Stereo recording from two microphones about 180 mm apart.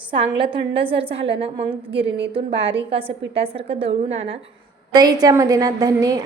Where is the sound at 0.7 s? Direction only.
30° right (ahead or behind).